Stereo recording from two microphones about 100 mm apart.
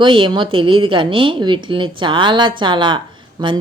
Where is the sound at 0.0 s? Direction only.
55° right (ahead or behind).